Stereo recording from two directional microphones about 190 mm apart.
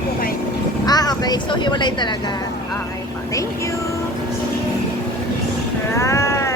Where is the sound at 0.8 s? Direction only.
20° left (ahead or behind).